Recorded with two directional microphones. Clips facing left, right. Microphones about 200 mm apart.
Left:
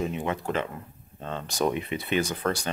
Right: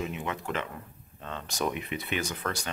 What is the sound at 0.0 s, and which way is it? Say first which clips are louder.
Speech: left 5 dB; 35° left (ahead or behind).